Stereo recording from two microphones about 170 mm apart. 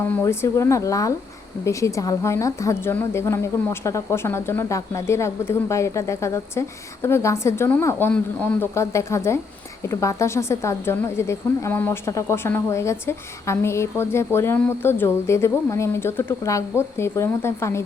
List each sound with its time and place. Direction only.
0.1 s a woman's voice: 15° left (ahead or behind)